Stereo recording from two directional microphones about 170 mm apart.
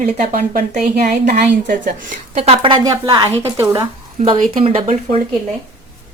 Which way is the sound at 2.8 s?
25° right (ahead or behind).